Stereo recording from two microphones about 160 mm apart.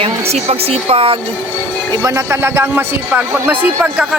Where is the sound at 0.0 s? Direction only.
40° right (ahead or behind).